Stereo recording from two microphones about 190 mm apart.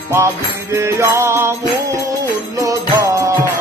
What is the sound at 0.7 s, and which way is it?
Music, 15° right (ahead or behind).